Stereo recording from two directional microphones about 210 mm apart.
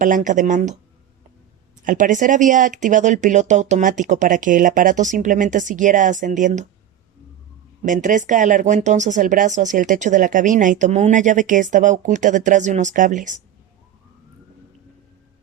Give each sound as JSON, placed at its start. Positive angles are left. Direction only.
{"t": 0.0, "sound": "speech", "side_deg": -40}
{"t": 1.8, "sound": "speech", "side_deg": -40}
{"t": 7.8, "sound": "speech", "side_deg": -35}